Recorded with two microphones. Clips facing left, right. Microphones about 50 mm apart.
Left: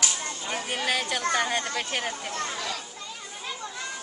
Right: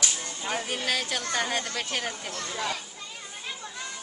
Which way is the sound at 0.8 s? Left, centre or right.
Centre.